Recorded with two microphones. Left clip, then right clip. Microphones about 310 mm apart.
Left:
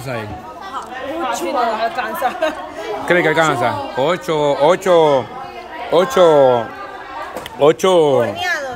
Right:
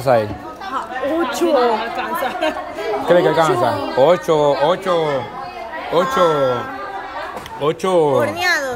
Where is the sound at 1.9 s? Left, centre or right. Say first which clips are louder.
Left 1 dB; centre.